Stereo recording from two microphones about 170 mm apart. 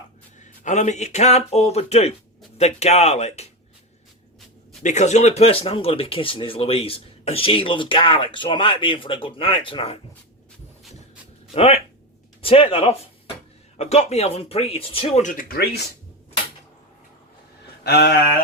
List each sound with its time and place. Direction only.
0.3 s speech: 45° left (ahead or behind)
4.8 s speech: 45° left (ahead or behind)
11.5 s speech: 35° left (ahead or behind); by 15.8 s 65° left (ahead or behind)
17.8 s a sound: 70° left (ahead or behind)